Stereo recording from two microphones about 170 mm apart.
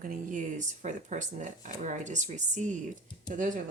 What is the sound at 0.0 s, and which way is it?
Speech, 55° right (ahead or behind).